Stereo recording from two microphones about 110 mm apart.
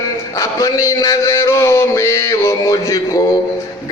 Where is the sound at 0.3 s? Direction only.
30° left (ahead or behind).